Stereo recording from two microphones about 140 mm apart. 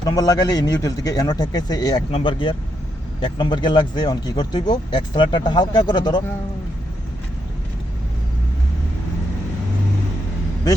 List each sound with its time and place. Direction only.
0.0 s a man's voice: 25° left (ahead or behind)
2.0 s speech: 40° left (ahead or behind)